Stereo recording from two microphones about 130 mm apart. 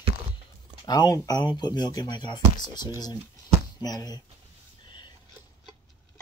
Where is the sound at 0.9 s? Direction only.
30° left (ahead or behind).